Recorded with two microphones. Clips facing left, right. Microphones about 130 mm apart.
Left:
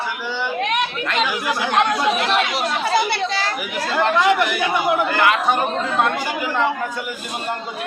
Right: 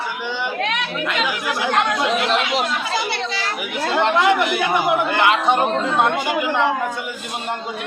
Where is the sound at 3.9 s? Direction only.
25° right (ahead or behind).